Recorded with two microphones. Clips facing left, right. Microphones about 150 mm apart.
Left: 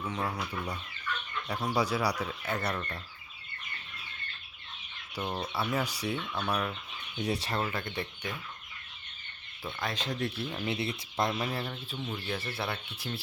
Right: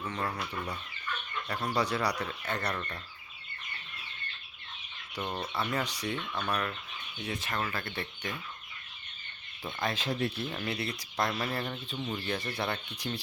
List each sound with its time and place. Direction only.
0.0 s speech: 10° left (ahead or behind)
5.1 s speech: 5° left (ahead or behind)
7.2 s speech: 35° left (ahead or behind)
7.6 s speech: 20° left (ahead or behind)
9.8 s speech: 5° right (ahead or behind)
10.3 s speech: 5° left (ahead or behind)
10.7 s speech: 25° left (ahead or behind)
11.9 s speech: centre (ahead or behind)